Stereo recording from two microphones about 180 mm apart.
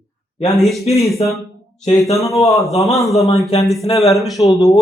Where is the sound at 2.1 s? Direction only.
15° left (ahead or behind).